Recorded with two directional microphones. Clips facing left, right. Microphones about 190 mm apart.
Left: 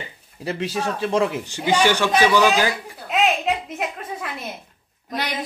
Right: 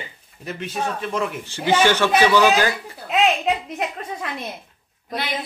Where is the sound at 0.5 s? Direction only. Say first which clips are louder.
Left 2 dB; 30° left (ahead or behind).